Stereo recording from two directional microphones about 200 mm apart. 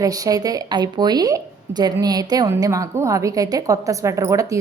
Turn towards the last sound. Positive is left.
turn(degrees=-15)  # may be behind; listen again after turning